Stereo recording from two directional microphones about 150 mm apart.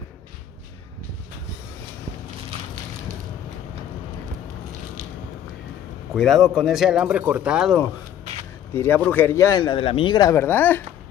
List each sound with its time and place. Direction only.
6.1 s speech: centre (ahead or behind)
8.7 s speech: 15° left (ahead or behind)
9.6 s speech: 35° left (ahead or behind)
10.3 s speech: 15° left (ahead or behind)